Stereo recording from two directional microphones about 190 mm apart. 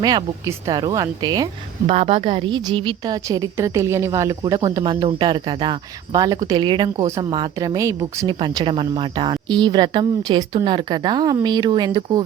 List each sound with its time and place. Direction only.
0.0 s a woman's voice: 20° right (ahead or behind)
1.9 s a woman's voice: 30° right (ahead or behind)